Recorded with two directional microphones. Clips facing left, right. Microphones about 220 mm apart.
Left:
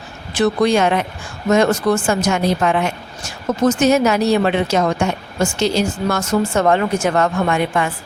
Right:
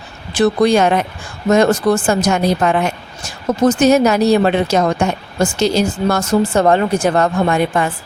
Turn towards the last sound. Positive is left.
turn(degrees=-35)  # may be behind; listen again after turning